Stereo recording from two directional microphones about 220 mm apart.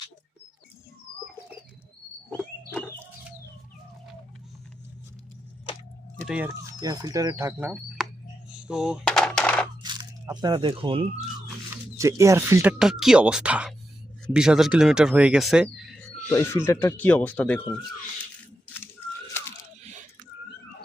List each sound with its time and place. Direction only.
2.3 s frog: 5° left (ahead or behind)
6.1 s speech: 5° right (ahead or behind)
8.5 s coin: 5° right (ahead or behind)
9.8 s a sound: 20° right (ahead or behind)
11.9 s speech: 15° right (ahead or behind)
16.3 s speech: 10° left (ahead or behind)